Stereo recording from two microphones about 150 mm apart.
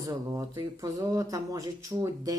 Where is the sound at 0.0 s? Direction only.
20° right (ahead or behind).